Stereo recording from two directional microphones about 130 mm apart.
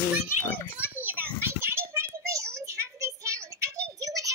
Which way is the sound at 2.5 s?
20° right (ahead or behind).